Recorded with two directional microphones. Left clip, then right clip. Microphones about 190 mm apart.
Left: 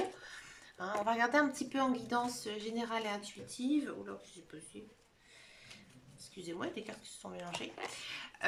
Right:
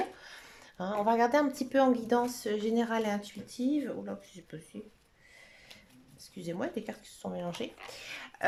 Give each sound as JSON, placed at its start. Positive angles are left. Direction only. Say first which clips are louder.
{"t": 0.2, "sound": "speech", "louder": "right 1 dB", "side_deg": -30}
{"t": 6.3, "sound": "speech", "louder": "right 5 dB", "side_deg": -30}